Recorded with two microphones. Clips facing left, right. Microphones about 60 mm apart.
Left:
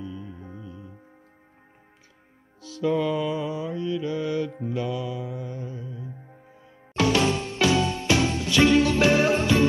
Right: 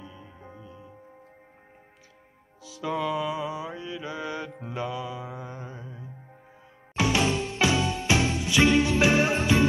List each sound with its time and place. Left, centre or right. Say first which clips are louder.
0.0 s music: left 8 dB; right
2.6 s music: left 5 dB; centre
4.7 s mantra: left 2 dB; centre
7.0 s music: left 3 dB; centre